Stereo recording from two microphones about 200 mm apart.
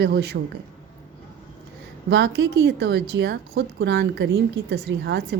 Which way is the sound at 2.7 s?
60° right (ahead or behind).